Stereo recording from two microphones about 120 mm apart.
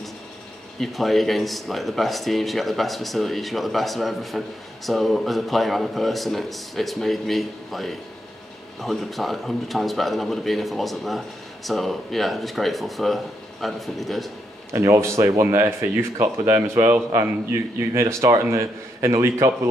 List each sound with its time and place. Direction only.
0.7 s speech: centre (ahead or behind)
14.7 s speech: 25° right (ahead or behind)